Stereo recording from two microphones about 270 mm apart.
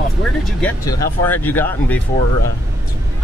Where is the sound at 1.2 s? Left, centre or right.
Centre.